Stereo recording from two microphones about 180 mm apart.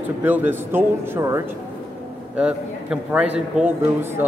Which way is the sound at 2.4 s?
5° right (ahead or behind).